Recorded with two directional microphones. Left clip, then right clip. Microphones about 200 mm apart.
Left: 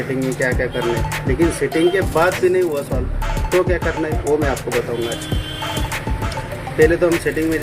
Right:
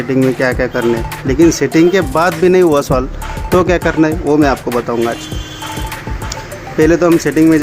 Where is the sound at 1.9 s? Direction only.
50° right (ahead or behind).